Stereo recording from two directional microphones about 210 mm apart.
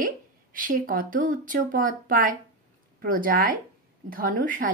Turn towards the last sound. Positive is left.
turn(degrees=-40)  # may be behind; listen again after turning